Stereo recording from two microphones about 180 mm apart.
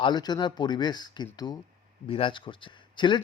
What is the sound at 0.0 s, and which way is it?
Speech, 25° left (ahead or behind).